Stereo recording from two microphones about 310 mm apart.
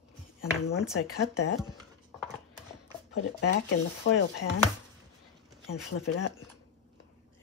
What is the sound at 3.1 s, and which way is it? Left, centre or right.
Speech, left.